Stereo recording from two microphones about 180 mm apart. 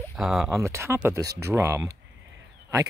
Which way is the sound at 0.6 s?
15° right (ahead or behind).